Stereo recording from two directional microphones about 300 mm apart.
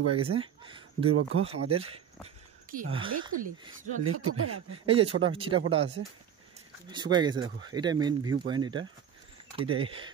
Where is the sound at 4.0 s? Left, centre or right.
Right.